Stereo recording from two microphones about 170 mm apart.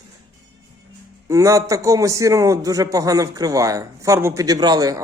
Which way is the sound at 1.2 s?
20° right (ahead or behind).